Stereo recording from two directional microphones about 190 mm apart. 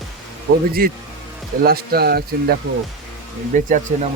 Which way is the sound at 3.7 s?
40° right (ahead or behind).